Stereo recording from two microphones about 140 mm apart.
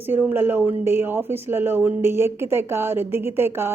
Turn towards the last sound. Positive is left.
turn(degrees=-15)  # may be behind; listen again after turning